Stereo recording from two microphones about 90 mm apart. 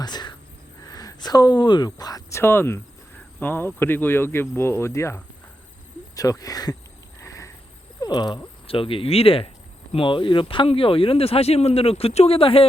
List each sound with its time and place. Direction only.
0.0 s speech: 50° left (ahead or behind)
2.3 s speech: 25° left (ahead or behind); by 6.7 s 45° left (ahead or behind)
7.2 s frog: 35° left (ahead or behind)
8.0 s frog: 50° left (ahead or behind)
8.6 s speech: 90° left
9.9 s speech: 70° left (ahead or behind); by 12.6 s 90° left